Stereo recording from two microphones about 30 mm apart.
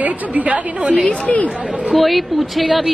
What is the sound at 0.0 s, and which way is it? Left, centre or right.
A woman's voice, right.